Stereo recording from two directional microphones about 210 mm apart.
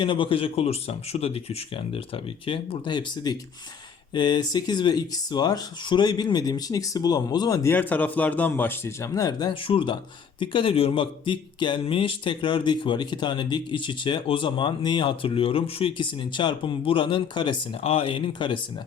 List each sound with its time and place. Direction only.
0.0 s speech: 25° left (ahead or behind)